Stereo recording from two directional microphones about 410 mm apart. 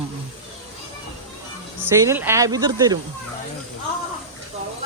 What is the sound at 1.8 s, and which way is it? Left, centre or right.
Speech, centre.